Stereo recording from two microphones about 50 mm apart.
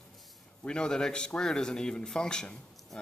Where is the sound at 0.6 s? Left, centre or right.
Centre.